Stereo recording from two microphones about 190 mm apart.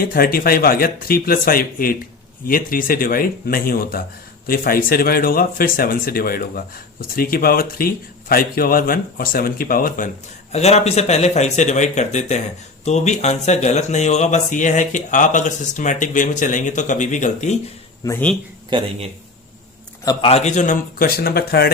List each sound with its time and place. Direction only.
0.0 s a man's voice: 50° left (ahead or behind)
10.5 s speech: 35° left (ahead or behind)
18.0 s speech: 15° left (ahead or behind)
20.1 s a man's voice: 30° left (ahead or behind); by 21.7 s 55° left (ahead or behind)